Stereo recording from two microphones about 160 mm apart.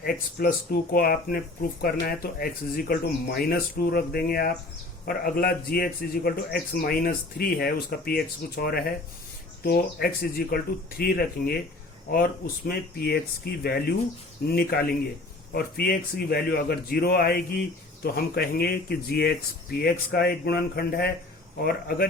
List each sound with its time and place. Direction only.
0.0 s speech: 65° left (ahead or behind)